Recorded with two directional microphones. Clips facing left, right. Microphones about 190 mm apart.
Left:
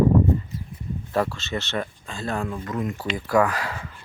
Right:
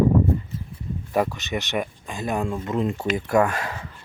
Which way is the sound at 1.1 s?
15° right (ahead or behind).